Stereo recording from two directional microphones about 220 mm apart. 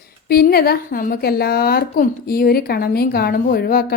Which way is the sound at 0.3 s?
45° left (ahead or behind).